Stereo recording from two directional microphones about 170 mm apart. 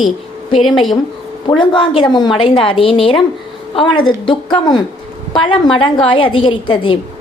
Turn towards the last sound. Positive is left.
turn(degrees=30)  # may be behind; listen again after turning